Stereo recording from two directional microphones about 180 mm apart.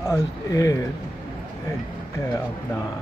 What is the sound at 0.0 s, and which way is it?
Speech, 20° left (ahead or behind).